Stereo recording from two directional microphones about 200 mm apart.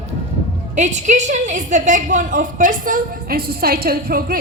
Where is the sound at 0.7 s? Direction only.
35° right (ahead or behind).